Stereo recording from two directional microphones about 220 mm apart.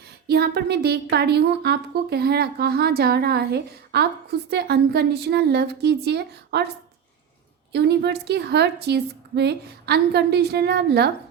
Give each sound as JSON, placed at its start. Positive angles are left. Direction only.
{"t": 0.3, "sound": "a woman's voice", "side_deg": -45}
{"t": 7.7, "sound": "a woman's voice", "side_deg": -50}